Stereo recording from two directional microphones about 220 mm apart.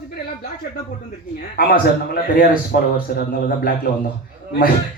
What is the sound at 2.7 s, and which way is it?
Speech, 45° left (ahead or behind).